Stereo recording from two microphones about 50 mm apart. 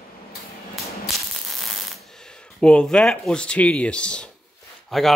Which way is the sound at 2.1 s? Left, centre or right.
Centre.